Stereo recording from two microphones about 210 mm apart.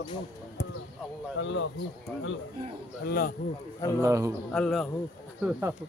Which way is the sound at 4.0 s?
15° right (ahead or behind).